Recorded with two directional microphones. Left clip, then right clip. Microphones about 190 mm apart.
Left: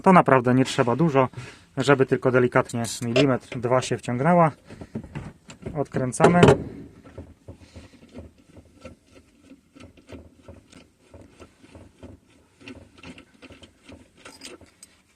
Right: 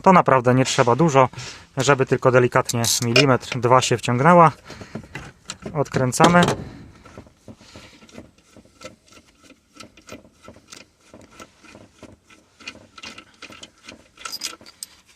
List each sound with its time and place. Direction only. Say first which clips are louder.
0.0 s speech: right 2 dB; 25° right (ahead or behind); by 6.4 s 50° right (ahead or behind)
14.6 s keys jangling: right 11 dB; 50° right (ahead or behind)